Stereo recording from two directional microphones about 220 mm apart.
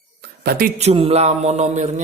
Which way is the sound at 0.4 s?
40° right (ahead or behind).